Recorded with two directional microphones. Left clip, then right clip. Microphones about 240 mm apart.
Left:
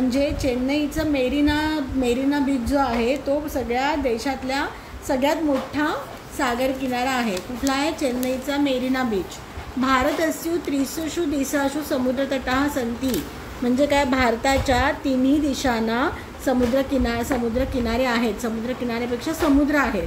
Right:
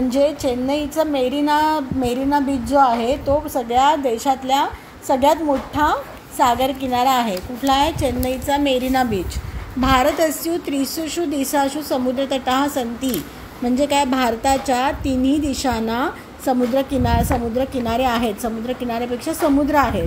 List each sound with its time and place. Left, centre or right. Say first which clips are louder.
0.1 s a woman's voice: right 5 dB; centre